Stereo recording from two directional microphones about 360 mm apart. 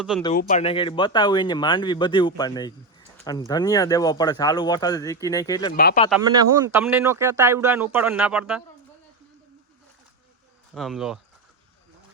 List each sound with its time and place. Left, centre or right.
0.3 s speech: left
5.7 s speech: left
6.1 s a man's voice: centre
10.8 s a man's voice: centre